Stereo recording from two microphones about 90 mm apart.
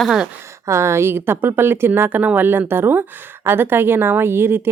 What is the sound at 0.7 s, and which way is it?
Speech, 30° right (ahead or behind).